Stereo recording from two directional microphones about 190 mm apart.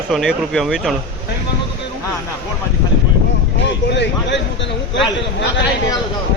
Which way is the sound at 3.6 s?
65° left (ahead or behind).